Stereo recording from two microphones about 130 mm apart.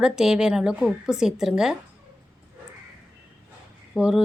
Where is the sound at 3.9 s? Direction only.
5° right (ahead or behind).